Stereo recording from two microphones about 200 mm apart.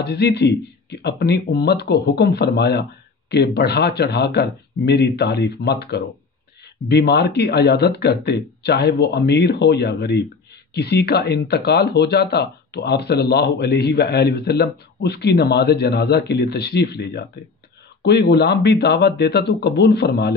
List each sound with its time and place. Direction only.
0.0 s speech: 55° left (ahead or behind)